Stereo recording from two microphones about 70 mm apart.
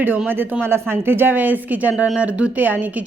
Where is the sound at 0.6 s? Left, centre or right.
Right.